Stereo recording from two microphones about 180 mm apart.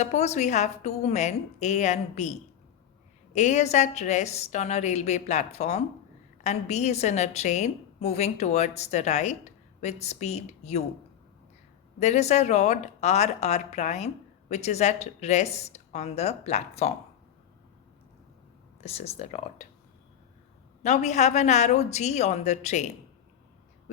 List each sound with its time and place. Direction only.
0.0 s a woman's voice: 40° left (ahead or behind)
3.3 s a woman's voice: 40° left (ahead or behind)
11.9 s a woman's voice: 40° left (ahead or behind)
18.8 s a woman's voice: 35° left (ahead or behind)
20.8 s a woman's voice: 40° left (ahead or behind)